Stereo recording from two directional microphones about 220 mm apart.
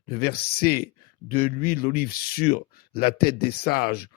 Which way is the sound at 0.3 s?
45° left (ahead or behind).